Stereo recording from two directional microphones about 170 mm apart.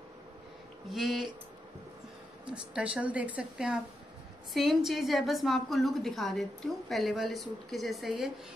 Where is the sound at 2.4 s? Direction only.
5° right (ahead or behind).